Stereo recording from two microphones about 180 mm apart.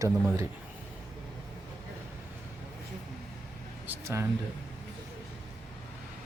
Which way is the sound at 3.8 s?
15° right (ahead or behind).